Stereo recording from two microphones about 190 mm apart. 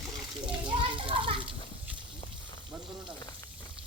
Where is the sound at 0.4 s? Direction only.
25° right (ahead or behind).